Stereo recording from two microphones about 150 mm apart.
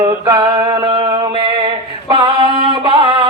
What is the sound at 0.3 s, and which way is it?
Male singing, 25° right (ahead or behind).